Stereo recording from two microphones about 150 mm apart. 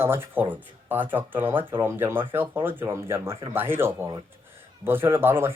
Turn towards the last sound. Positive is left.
turn(degrees=-15)  # may be behind; listen again after turning